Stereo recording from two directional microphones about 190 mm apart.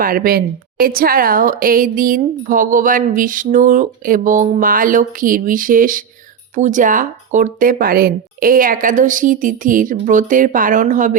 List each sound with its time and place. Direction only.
0.0 s a woman's voice: 50° right (ahead or behind)